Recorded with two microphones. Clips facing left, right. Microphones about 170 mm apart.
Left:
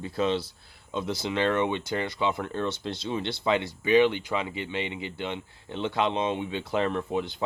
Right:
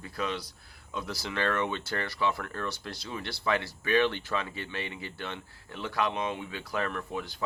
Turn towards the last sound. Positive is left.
turn(degrees=25)  # may be behind; listen again after turning